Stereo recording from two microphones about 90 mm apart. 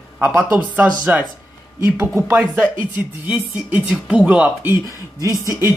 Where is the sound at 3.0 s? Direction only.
20° right (ahead or behind).